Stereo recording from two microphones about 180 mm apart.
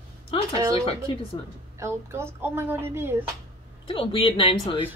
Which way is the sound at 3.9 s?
30° left (ahead or behind).